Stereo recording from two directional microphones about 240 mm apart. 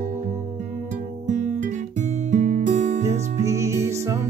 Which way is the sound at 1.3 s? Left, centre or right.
Right.